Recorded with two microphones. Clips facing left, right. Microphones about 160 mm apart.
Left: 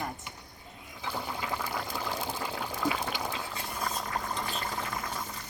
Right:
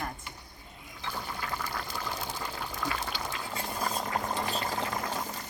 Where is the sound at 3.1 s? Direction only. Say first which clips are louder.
Left 2 dB; 15° left (ahead or behind).